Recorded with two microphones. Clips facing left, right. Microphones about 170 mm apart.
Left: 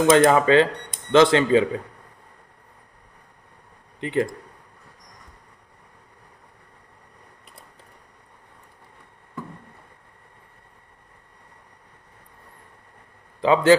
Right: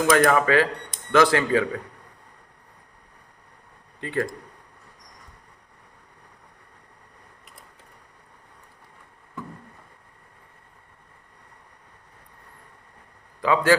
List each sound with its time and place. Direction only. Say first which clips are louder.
0.1 s speech: left 3 dB; 25° left (ahead or behind)
4.0 s speech: left 4 dB; 20° left (ahead or behind)
13.4 s speech: left 4 dB; 25° left (ahead or behind)